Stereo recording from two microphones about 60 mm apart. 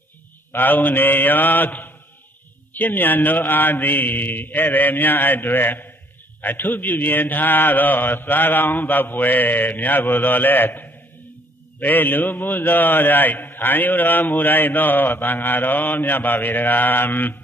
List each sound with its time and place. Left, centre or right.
0.5 s a man's voice: left